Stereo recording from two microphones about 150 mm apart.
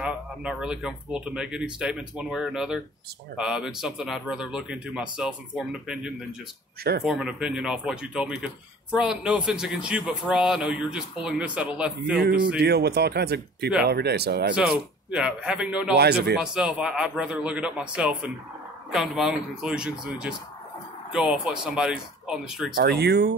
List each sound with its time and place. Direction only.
0.0 s speech: 5° right (ahead or behind)
12.2 s speech: 80° right
14.5 s a man's voice: 5° right (ahead or behind)
16.0 s speech: 90° right
16.3 s a man's voice: 5° right (ahead or behind)
22.8 s speech: 90° right